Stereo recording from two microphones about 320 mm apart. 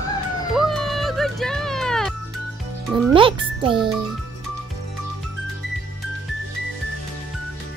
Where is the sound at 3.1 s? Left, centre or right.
Centre.